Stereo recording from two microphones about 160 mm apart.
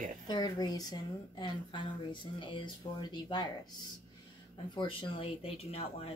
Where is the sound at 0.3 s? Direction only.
25° left (ahead or behind).